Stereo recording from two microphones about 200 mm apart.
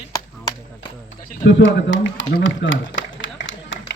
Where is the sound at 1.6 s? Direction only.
65° left (ahead or behind).